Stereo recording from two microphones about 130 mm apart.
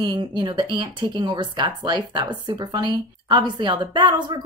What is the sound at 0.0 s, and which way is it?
A woman's voice, 35° right (ahead or behind).